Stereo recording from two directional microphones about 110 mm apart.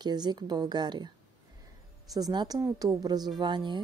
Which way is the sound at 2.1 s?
40° right (ahead or behind).